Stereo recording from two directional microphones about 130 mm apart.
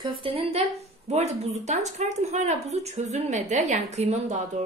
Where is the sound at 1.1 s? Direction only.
55° right (ahead or behind).